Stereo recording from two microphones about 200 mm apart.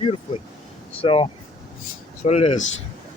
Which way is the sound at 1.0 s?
25° left (ahead or behind).